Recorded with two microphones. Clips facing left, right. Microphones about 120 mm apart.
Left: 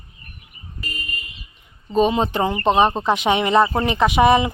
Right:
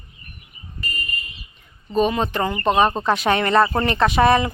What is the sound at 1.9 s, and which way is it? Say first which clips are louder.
Speech: left 2 dB; 25° left (ahead or behind).